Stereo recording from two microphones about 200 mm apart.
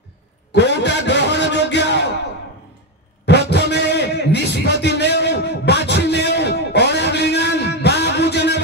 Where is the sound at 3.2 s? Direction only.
60° left (ahead or behind).